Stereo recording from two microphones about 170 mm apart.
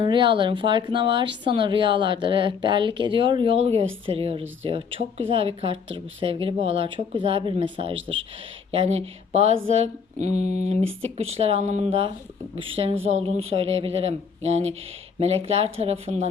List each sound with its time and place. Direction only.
0.0 s speech: 30° right (ahead or behind)